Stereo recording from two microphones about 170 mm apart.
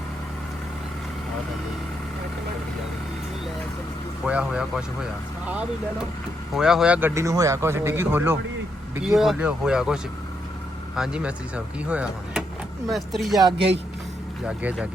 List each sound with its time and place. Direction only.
4.3 s speech: 5° right (ahead or behind)
6.5 s speech: 5° right (ahead or behind)
7.1 s speech: 20° right (ahead or behind); by 13.4 s centre (ahead or behind)
13.4 s speech: 30° right (ahead or behind)
14.4 s speech: 5° right (ahead or behind)